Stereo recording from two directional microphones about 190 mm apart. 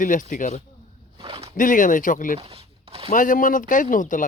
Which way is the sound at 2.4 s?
30° right (ahead or behind).